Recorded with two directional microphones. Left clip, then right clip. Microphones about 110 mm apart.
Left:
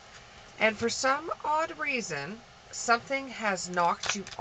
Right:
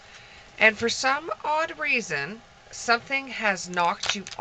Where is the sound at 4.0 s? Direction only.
15° right (ahead or behind).